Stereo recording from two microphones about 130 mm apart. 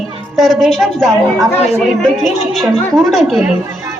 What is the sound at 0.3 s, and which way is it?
A woman's voice, centre (ahead or behind).